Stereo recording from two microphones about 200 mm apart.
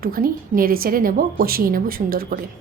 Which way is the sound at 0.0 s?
45° right (ahead or behind).